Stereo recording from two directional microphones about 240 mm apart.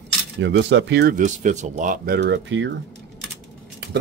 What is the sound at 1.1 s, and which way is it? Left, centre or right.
Speech, right.